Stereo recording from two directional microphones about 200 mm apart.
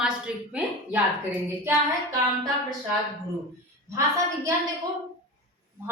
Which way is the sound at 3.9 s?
15° right (ahead or behind).